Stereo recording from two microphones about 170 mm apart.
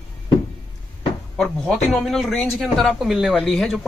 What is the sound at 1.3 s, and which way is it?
Speech, centre (ahead or behind).